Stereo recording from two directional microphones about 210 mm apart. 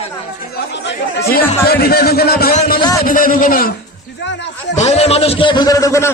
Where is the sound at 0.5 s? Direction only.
50° left (ahead or behind).